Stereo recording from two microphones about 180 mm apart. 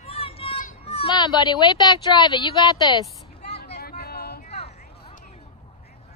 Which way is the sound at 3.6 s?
60° left (ahead or behind).